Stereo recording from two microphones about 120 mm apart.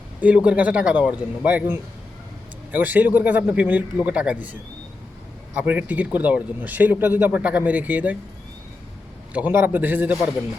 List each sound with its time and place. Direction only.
0.2 s speech: 10° right (ahead or behind)
5.5 s speech: 15° right (ahead or behind)
9.3 s speech: 15° right (ahead or behind)